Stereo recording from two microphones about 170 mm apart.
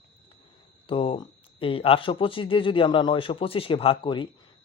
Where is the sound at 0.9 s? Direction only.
30° left (ahead or behind).